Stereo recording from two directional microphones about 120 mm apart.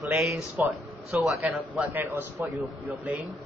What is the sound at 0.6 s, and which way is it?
A man's voice, 15° right (ahead or behind).